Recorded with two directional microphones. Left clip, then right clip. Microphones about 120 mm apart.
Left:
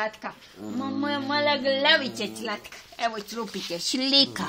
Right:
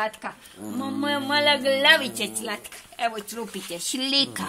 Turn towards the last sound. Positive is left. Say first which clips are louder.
# left 2 dB
turn(degrees=35)  # may be behind; listen again after turning